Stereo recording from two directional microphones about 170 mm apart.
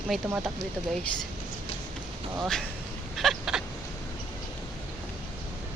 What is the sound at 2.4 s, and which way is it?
Speech, 5° left (ahead or behind).